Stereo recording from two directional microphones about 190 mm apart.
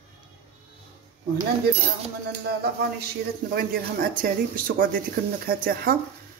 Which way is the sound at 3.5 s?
50° right (ahead or behind).